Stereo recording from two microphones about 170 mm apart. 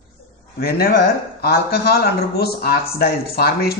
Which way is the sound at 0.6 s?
60° left (ahead or behind).